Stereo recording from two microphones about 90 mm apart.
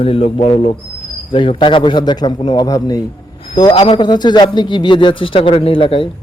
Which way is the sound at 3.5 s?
55° left (ahead or behind).